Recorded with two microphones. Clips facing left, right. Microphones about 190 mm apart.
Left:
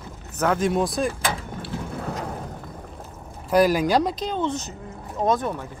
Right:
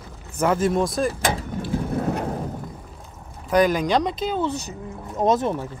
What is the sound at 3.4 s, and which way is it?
Speech, 5° left (ahead or behind).